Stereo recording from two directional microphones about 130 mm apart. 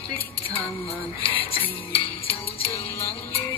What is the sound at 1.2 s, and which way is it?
Music, 45° left (ahead or behind).